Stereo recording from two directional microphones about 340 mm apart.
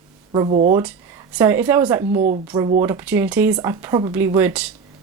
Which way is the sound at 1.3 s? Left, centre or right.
Centre.